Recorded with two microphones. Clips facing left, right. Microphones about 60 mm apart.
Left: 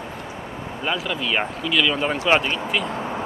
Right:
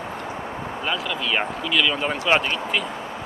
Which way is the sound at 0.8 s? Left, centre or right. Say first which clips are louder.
Left 2 dB; centre.